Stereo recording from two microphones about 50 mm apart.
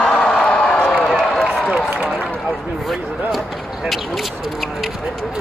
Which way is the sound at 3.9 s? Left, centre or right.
Centre.